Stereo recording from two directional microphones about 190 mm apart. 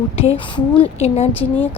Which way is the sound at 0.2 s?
30° left (ahead or behind).